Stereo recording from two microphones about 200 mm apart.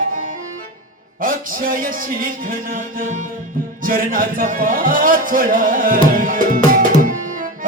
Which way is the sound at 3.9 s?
45° right (ahead or behind).